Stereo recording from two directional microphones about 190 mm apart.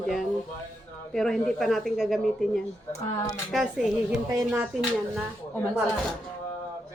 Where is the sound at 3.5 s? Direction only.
Centre (ahead or behind).